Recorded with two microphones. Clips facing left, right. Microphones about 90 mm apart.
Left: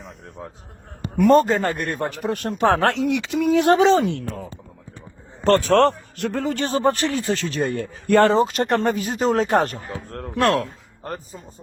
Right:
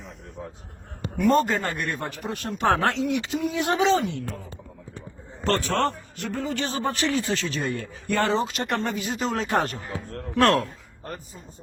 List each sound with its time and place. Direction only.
1.1 s speech: 50° left (ahead or behind)
1.5 s speech: 35° left (ahead or behind)
2.1 s speech: 55° left (ahead or behind)
3.0 s a sound: 85° left; by 3.8 s 70° left (ahead or behind)
3.8 s speech: 45° left (ahead or behind)
5.5 s speech: 55° left (ahead or behind)
8.0 s speech: 60° left (ahead or behind); by 11.3 s 40° left (ahead or behind)